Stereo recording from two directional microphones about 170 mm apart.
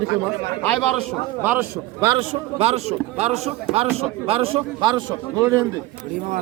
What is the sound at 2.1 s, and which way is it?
A man's voice, 35° right (ahead or behind).